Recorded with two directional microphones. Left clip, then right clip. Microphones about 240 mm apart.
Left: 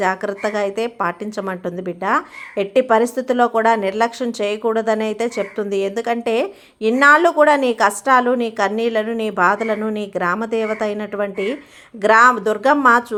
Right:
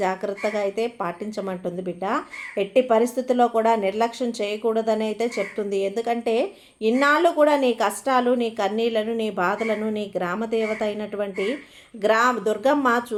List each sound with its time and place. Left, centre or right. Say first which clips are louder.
0.0 s speech: left 5 dB; left